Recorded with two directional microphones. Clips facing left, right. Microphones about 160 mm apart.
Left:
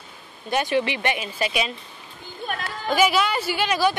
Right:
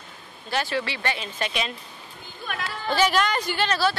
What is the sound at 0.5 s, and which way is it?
A woman's voice, 20° left (ahead or behind).